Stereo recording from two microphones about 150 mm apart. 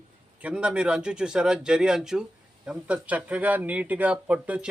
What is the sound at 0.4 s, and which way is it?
A man's voice, 5° right (ahead or behind).